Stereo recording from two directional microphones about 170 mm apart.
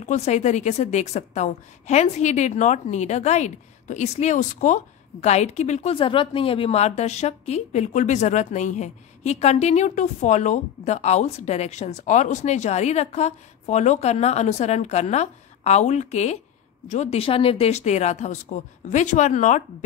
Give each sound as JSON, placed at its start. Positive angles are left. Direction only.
{"t": 0.0, "sound": "a woman's voice", "side_deg": 45}